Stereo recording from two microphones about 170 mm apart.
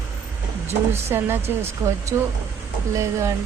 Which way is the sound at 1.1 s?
15° right (ahead or behind).